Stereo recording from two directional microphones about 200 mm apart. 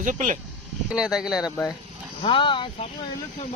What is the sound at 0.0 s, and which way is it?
Speech, 40° right (ahead or behind).